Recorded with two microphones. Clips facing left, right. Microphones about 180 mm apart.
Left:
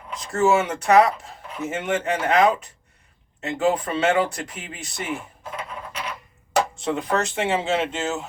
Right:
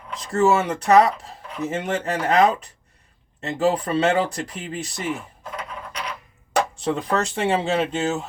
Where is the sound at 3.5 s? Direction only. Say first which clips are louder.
Right 1 dB; 35° right (ahead or behind).